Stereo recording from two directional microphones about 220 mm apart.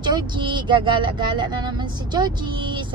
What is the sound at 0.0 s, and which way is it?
Speech, 20° right (ahead or behind).